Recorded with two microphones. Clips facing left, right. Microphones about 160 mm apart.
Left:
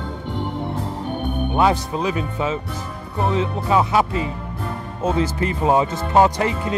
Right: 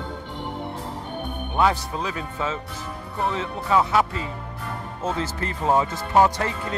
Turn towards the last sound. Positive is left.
turn(degrees=15)  # may be behind; listen again after turning